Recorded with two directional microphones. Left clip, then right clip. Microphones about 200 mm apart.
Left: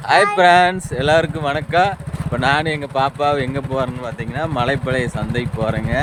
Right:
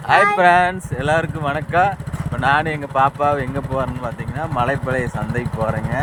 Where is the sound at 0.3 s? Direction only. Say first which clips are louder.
Left 2 dB; 10° left (ahead or behind).